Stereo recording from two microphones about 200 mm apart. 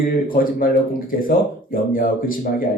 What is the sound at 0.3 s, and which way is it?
Speech, 45° left (ahead or behind).